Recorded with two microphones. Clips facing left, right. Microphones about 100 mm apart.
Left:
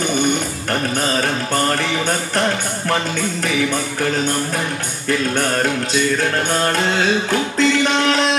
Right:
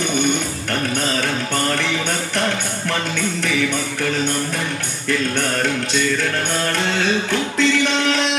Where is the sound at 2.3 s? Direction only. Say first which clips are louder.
Left 2 dB; 35° left (ahead or behind).